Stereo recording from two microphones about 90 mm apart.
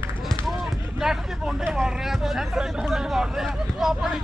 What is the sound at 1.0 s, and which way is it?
Vehicle, 5° right (ahead or behind).